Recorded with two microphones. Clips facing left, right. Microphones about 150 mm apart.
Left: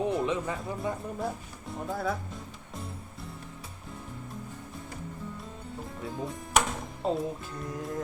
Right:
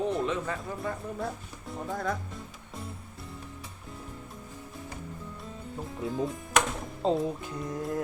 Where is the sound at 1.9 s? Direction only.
5° left (ahead or behind).